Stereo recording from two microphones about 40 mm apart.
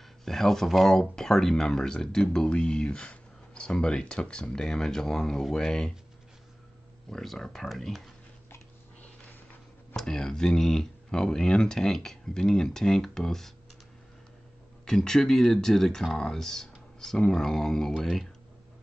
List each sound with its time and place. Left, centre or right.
0.2 s speech: centre
0.7 s speech: centre
0.9 s speech: centre
7.1 s speech: centre
10.0 s speech: centre
14.9 s speech: centre